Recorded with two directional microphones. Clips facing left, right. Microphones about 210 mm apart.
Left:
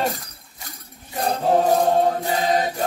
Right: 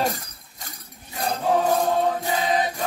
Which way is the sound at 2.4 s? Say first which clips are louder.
Left 3 dB; 40° left (ahead or behind).